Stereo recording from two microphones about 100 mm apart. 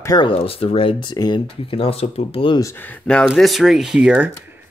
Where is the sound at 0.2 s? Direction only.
70° left (ahead or behind); by 1.4 s 45° left (ahead or behind).